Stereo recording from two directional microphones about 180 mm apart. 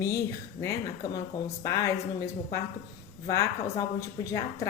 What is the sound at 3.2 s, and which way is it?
A woman's voice, 15° left (ahead or behind).